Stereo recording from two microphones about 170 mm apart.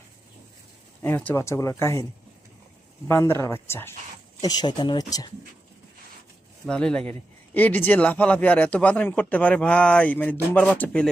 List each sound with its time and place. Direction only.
1.0 s a man's voice: 10° left (ahead or behind)
3.1 s a man's voice: 15° left (ahead or behind)
6.7 s a man's voice: 5° left (ahead or behind)